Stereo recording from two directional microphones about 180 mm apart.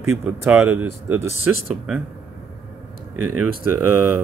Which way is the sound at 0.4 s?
10° right (ahead or behind).